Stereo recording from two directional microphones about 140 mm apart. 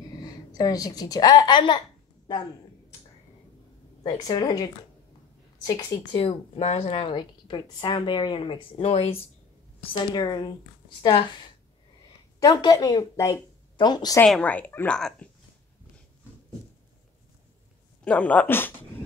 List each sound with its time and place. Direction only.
0.0 s a woman's voice: 25° left (ahead or behind)
4.0 s a woman's voice: 30° left (ahead or behind)
6.1 s speech: 45° left (ahead or behind)
9.9 s a woman's voice: 30° left (ahead or behind)
12.4 s speech: 30° left (ahead or behind)
14.2 s speech: 10° left (ahead or behind)
18.0 s speech: 10° left (ahead or behind)